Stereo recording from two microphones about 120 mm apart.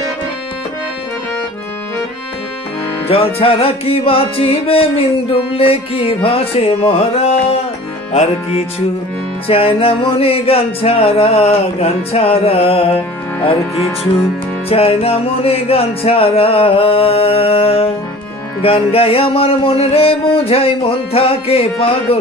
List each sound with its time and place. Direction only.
3.1 s speech: 50° left (ahead or behind)
9.5 s speech: 50° left (ahead or behind)
14.7 s speech: 55° left (ahead or behind)